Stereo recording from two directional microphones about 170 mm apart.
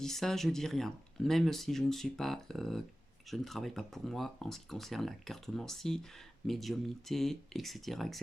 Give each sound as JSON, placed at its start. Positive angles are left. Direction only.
{"t": 0.0, "sound": "speech", "side_deg": 0}